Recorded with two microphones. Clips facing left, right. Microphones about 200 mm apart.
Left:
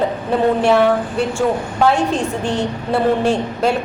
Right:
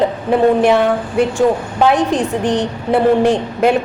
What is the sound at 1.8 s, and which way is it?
A woman's voice, 15° right (ahead or behind).